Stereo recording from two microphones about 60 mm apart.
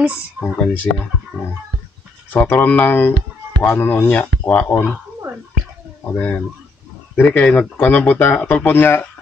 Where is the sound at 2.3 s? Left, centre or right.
Left.